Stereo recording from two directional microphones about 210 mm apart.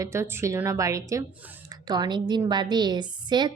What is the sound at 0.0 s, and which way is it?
A woman's voice, 15° right (ahead or behind).